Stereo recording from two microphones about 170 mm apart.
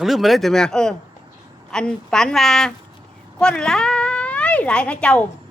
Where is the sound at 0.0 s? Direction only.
Centre (ahead or behind).